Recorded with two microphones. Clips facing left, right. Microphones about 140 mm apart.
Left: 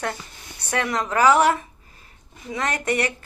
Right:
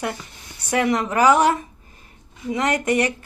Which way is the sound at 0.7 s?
15° right (ahead or behind).